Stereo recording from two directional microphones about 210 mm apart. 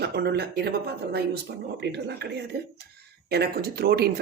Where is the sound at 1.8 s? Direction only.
50° right (ahead or behind).